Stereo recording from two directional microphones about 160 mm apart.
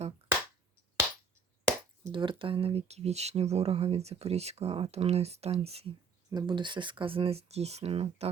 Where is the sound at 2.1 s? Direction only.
30° right (ahead or behind).